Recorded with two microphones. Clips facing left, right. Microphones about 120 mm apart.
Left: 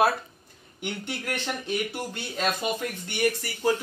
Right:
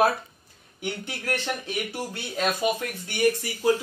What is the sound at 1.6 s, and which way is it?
Speech, 5° right (ahead or behind).